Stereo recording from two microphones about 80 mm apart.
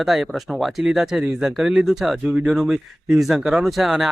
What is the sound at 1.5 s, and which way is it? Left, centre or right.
Speech, centre.